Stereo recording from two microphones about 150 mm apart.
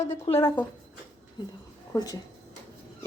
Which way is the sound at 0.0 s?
45° left (ahead or behind).